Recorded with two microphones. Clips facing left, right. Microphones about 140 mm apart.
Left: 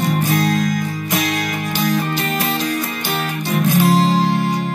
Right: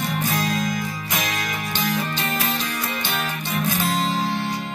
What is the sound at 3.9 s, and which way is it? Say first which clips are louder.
Music: left 8 dB; 40° left (ahead or behind).